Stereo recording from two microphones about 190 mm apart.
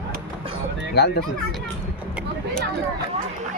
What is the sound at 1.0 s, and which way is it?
Speech, 60° left (ahead or behind).